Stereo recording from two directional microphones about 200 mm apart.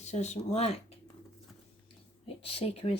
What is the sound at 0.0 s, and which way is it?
Speech, 35° left (ahead or behind).